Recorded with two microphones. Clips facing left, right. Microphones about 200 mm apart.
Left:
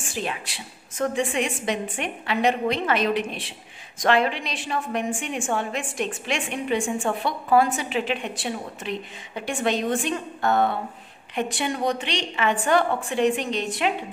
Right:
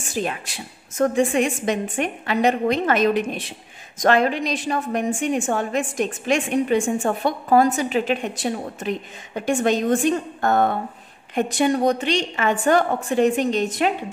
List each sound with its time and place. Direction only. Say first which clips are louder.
0.0 s a woman's voice: right 4 dB; 45° right (ahead or behind)